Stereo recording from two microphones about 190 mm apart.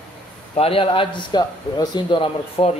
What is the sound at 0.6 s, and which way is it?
Speech, 30° left (ahead or behind).